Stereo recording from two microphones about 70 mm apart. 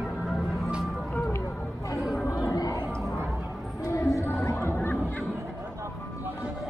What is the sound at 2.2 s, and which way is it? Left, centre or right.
Chatter, left.